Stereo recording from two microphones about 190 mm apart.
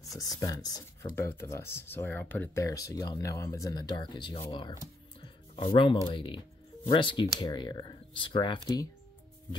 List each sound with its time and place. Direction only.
0.2 s speech: 20° left (ahead or behind)